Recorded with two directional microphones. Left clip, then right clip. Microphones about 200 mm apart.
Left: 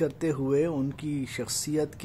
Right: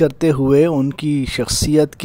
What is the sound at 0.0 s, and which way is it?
Speech, 45° right (ahead or behind).